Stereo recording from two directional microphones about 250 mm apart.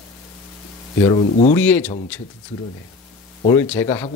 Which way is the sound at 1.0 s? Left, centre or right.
Left.